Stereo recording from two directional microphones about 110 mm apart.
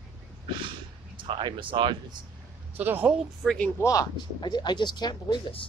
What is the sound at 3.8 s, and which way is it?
Speech, 30° left (ahead or behind).